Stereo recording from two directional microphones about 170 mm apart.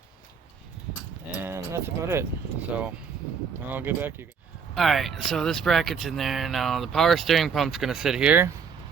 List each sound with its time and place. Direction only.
1.4 s a sound: 15° right (ahead or behind)
3.7 s speech: 10° right (ahead or behind)
4.7 s speech: centre (ahead or behind)